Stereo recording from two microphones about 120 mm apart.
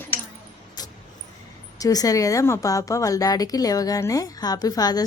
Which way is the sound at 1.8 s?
30° left (ahead or behind).